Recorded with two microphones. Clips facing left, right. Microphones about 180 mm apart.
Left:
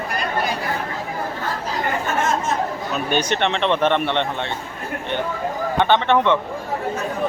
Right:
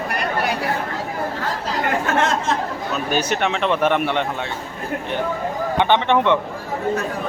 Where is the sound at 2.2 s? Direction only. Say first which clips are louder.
Even; 70° right (ahead or behind).